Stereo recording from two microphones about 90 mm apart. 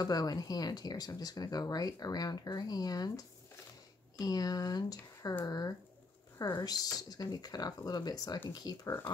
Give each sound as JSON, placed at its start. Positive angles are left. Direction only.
{"t": 0.0, "sound": "speech", "side_deg": 45}